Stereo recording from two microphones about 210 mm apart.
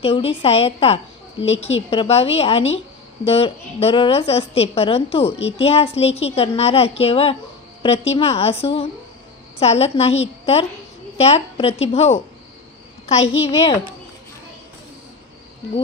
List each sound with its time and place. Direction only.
0.0 s a woman's voice: 30° left (ahead or behind)